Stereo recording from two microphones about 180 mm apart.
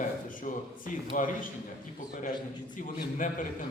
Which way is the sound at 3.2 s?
50° left (ahead or behind).